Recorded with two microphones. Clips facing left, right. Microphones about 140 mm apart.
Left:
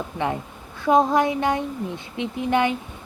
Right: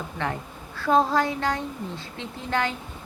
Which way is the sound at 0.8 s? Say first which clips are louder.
Left 3 dB; 20° left (ahead or behind).